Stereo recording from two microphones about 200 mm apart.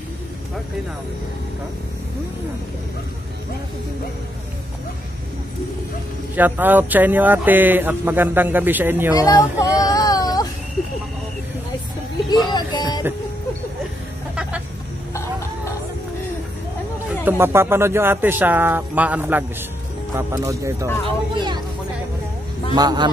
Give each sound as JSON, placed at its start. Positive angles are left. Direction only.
{"t": 6.3, "sound": "speech", "side_deg": -10}
{"t": 9.1, "sound": "speech", "side_deg": 20}
{"t": 9.8, "sound": "baby cry", "side_deg": 15}
{"t": 12.3, "sound": "music", "side_deg": 20}
{"t": 14.3, "sound": "a sound", "side_deg": -5}
{"t": 17.2, "sound": "speech", "side_deg": -10}
{"t": 21.4, "sound": "vehicle", "side_deg": -20}
{"t": 22.8, "sound": "speech", "side_deg": -20}